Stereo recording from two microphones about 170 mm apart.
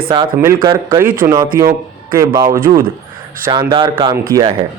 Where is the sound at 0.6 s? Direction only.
20° right (ahead or behind).